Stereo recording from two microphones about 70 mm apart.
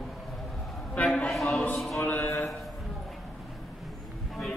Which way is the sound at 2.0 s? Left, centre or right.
Left.